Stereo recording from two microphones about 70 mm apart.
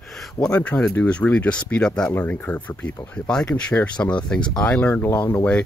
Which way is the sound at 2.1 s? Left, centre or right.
Left.